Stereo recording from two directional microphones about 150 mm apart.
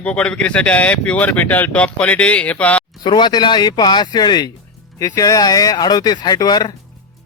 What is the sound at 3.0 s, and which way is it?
Speech, 30° left (ahead or behind).